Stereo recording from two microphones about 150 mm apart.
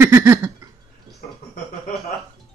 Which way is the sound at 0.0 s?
15° right (ahead or behind).